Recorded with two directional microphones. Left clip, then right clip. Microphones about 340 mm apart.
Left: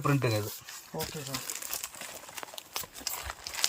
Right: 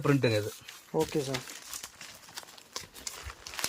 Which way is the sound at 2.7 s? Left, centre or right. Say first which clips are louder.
Left 3 dB; centre.